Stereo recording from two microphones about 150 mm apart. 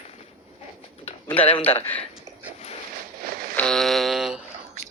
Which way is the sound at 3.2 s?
70° right (ahead or behind).